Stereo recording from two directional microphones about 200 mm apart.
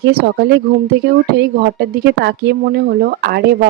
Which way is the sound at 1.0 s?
55° right (ahead or behind).